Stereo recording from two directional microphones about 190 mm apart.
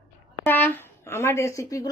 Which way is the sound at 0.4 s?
10° left (ahead or behind).